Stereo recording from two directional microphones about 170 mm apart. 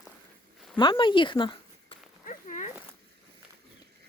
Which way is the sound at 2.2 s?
50° left (ahead or behind).